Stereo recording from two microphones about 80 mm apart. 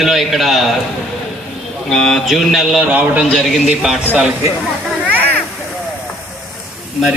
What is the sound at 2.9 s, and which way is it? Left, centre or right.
A man's voice, centre.